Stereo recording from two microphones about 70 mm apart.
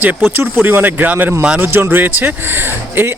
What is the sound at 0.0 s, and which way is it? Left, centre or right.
Speech, right.